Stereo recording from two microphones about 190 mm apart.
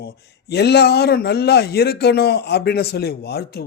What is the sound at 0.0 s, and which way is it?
Speech, 60° left (ahead or behind).